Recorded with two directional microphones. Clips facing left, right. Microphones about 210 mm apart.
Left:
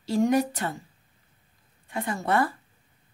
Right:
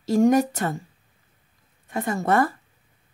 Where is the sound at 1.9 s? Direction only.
45° right (ahead or behind).